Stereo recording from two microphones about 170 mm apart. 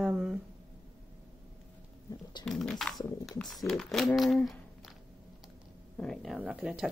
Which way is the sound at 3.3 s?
Centre (ahead or behind).